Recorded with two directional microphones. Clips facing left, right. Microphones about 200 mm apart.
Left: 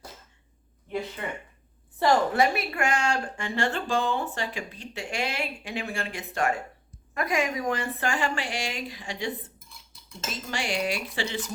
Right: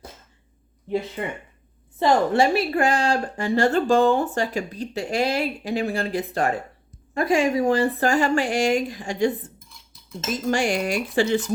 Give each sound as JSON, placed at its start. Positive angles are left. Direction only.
{"t": 2.0, "sound": "a woman's voice", "side_deg": -25}
{"t": 9.6, "sound": "cutlery", "side_deg": 0}
{"t": 10.5, "sound": "speech", "side_deg": -45}